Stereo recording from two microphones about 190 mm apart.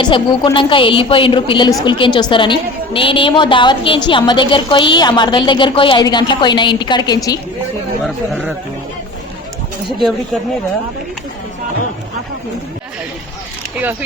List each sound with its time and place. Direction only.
0.0 s a woman's voice: 25° left (ahead or behind)
8.0 s speech: centre (ahead or behind)